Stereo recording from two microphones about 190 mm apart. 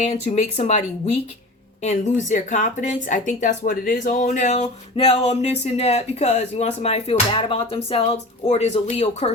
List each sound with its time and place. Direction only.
0.0 s speech: 35° left (ahead or behind)
1.8 s speech: 40° left (ahead or behind)